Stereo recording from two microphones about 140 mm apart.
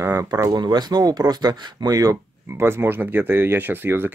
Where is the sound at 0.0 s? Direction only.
20° right (ahead or behind).